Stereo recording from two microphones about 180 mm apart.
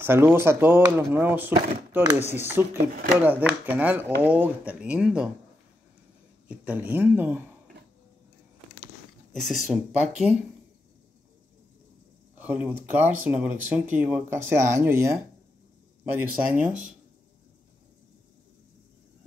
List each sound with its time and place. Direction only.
0.0 s speech: 10° right (ahead or behind)
6.5 s speech: 5° right (ahead or behind)
9.3 s speech: centre (ahead or behind)
12.4 s speech: 10° right (ahead or behind)
16.3 s speech: 50° right (ahead or behind)